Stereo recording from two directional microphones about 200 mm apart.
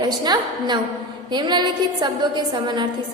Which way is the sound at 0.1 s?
20° right (ahead or behind).